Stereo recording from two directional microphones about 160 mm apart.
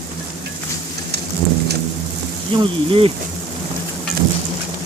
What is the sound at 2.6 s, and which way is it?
Speech, 35° right (ahead or behind).